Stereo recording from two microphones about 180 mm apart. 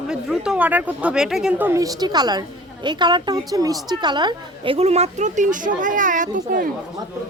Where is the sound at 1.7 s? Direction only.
20° right (ahead or behind).